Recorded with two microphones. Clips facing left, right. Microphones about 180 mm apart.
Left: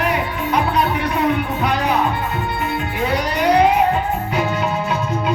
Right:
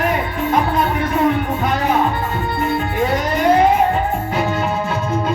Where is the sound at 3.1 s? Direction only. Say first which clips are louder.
Right 1 dB; 45° right (ahead or behind).